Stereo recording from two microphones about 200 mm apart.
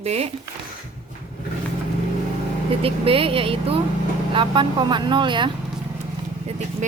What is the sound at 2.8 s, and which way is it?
Speech, 25° right (ahead or behind).